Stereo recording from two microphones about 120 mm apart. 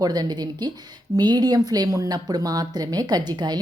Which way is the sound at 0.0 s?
35° right (ahead or behind).